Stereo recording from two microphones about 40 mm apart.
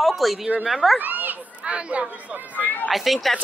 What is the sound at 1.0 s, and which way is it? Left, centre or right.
Speech, right.